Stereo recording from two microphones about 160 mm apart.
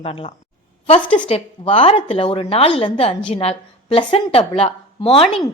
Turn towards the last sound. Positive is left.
turn(degrees=35)  # may be behind; listen again after turning